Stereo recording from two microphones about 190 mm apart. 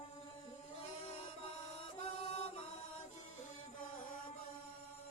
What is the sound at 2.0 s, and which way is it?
Chant, 30° left (ahead or behind).